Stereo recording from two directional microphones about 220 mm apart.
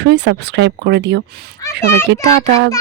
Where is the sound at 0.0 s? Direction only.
50° right (ahead or behind).